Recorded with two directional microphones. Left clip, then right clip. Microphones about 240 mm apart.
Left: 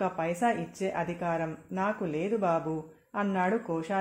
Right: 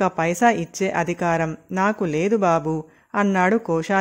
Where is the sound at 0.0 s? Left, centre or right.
Right.